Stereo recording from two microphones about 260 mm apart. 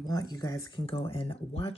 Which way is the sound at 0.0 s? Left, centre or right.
Centre.